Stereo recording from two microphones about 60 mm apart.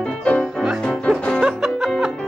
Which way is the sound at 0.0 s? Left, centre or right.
Left.